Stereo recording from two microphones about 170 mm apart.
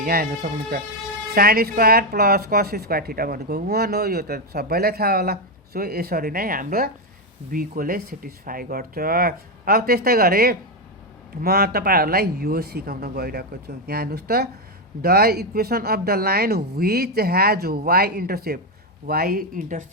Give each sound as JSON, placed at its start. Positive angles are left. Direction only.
{"t": 0.0, "sound": "speech", "side_deg": -60}